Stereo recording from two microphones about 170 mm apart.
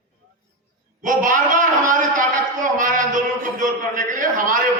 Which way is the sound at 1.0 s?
50° right (ahead or behind).